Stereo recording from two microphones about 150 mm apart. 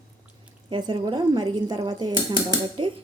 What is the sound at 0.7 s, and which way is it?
Speech, 30° right (ahead or behind).